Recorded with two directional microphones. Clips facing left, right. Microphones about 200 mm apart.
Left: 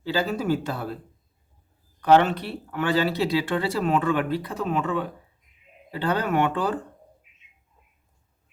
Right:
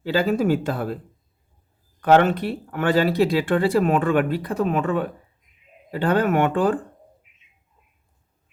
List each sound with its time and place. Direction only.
0.3 s speech: 50° right (ahead or behind)
2.1 s speech: 50° right (ahead or behind)